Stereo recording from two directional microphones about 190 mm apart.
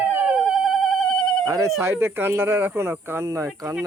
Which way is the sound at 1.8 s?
15° right (ahead or behind).